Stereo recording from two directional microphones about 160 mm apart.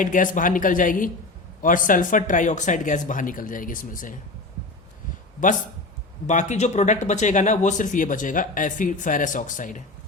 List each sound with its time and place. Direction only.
0.0 s speech: 55° left (ahead or behind)
6.2 s speech: 50° left (ahead or behind)